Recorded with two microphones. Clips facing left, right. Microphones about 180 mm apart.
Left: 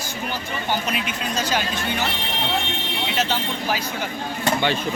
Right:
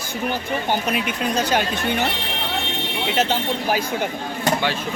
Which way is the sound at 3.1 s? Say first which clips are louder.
Right 4 dB; 50° right (ahead or behind).